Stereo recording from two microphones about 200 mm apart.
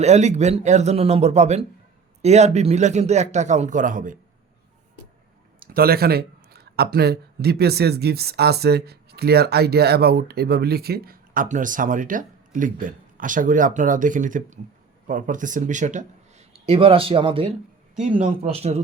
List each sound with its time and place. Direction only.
0.0 s a man's voice: 35° right (ahead or behind)
5.5 s a man's voice: 50° right (ahead or behind); by 18.8 s 30° right (ahead or behind)